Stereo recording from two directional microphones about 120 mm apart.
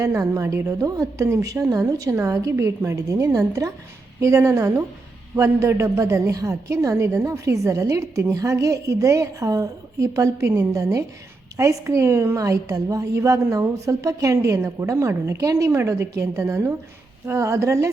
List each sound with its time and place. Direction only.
0.0 s a woman's voice: 25° right (ahead or behind)